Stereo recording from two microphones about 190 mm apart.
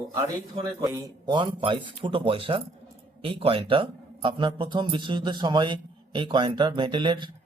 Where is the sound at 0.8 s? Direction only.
20° right (ahead or behind).